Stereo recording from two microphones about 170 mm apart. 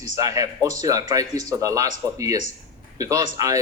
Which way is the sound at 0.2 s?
20° right (ahead or behind).